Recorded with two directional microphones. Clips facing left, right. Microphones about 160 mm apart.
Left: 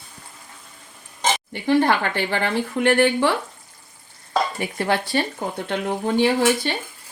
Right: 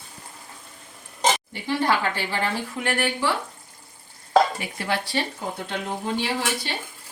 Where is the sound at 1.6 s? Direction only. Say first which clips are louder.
Left 5 dB; 55° left (ahead or behind).